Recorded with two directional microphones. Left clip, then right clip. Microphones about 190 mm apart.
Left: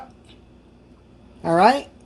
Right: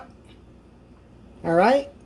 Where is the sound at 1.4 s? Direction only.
15° left (ahead or behind).